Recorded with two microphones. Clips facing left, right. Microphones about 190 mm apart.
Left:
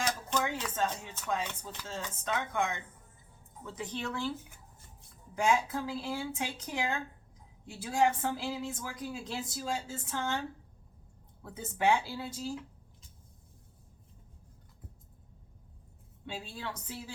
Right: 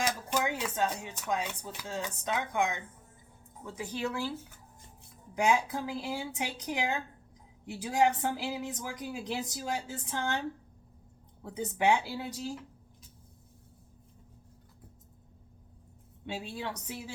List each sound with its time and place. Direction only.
0.0 s a woman's voice: 10° right (ahead or behind)
5.3 s a woman's voice: 15° right (ahead or behind)
11.4 s a woman's voice: 20° right (ahead or behind)
16.2 s a woman's voice: 15° right (ahead or behind)